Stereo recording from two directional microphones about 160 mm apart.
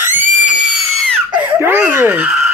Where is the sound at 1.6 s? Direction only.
10° right (ahead or behind).